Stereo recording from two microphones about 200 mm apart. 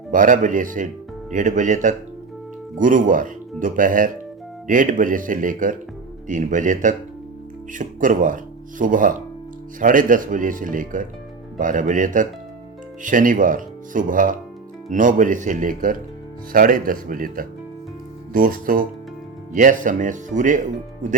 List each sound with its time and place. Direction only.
0.1 s speech: 40° right (ahead or behind)